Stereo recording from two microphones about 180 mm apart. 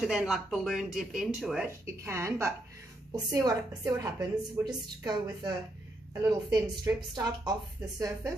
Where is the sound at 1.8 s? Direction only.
15° right (ahead or behind).